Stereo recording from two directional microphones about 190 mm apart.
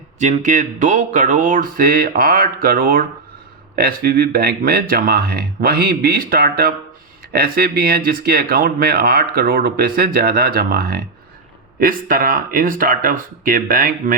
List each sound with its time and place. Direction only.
0.2 s speech: 40° right (ahead or behind)